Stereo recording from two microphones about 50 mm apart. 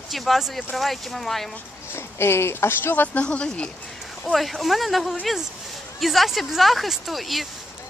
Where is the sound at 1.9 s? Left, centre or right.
Left.